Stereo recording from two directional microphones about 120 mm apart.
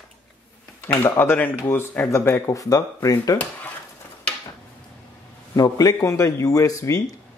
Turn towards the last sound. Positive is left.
turn(degrees=25)  # may be behind; listen again after turning